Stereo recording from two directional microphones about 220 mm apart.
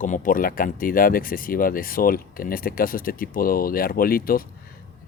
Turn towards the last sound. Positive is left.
turn(degrees=40)  # may be behind; listen again after turning